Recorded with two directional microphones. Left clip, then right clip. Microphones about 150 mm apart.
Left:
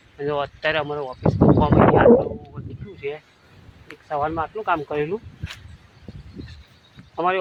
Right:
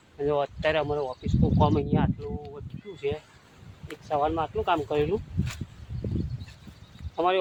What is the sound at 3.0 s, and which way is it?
Speech, 20° left (ahead or behind).